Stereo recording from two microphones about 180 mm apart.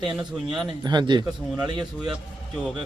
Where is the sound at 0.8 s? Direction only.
25° right (ahead or behind).